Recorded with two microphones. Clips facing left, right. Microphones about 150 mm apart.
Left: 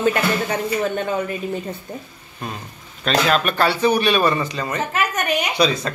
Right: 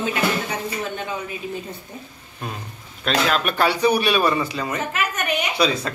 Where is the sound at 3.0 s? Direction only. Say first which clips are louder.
Left 2 dB; 5° right (ahead or behind).